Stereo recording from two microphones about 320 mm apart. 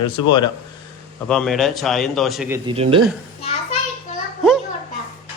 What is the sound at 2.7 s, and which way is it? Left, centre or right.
Speech, centre.